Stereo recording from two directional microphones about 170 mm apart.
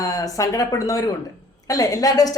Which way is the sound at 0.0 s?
20° left (ahead or behind).